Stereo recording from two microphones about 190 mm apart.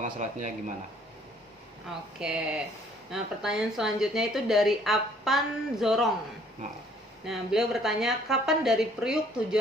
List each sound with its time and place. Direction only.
0.0 s speech: 40° right (ahead or behind)
2.1 s a woman's voice: 5° right (ahead or behind)
7.3 s a woman's voice: centre (ahead or behind)